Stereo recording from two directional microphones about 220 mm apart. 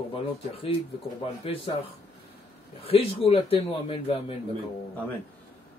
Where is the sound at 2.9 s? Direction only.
25° left (ahead or behind).